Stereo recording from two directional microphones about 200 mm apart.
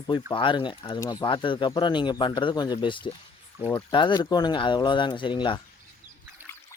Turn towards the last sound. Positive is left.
turn(degrees=25)  # may be behind; listen again after turning